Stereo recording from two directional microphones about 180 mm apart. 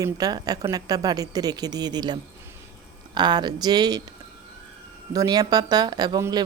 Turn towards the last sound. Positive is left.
turn(degrees=-20)  # may be behind; listen again after turning